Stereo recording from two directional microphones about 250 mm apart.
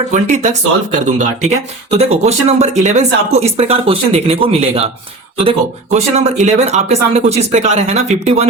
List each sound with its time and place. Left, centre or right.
0.1 s speech: right